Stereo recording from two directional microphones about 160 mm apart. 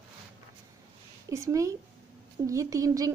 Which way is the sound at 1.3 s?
20° right (ahead or behind).